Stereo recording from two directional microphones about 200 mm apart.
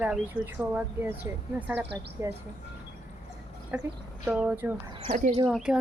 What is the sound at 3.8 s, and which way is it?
Speech, 10° right (ahead or behind).